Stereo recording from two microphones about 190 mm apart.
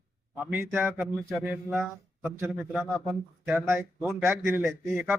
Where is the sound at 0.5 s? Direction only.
10° right (ahead or behind).